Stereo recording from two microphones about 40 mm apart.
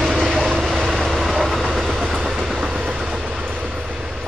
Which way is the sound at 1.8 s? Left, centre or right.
Centre.